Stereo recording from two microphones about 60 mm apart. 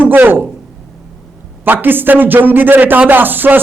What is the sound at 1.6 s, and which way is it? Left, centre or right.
A man's voice, right.